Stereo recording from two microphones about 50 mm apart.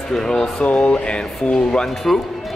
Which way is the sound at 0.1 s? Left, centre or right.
Centre.